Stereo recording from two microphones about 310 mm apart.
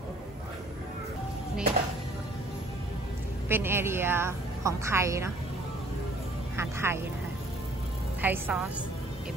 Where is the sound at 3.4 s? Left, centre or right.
Centre.